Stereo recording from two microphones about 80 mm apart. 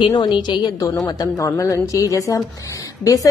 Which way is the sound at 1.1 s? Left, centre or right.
Left.